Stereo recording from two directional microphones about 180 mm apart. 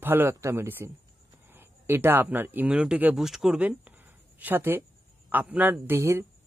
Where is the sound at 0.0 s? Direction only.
10° right (ahead or behind).